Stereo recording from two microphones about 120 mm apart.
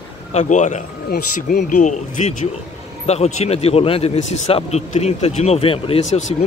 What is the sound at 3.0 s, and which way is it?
Speech, 65° left (ahead or behind).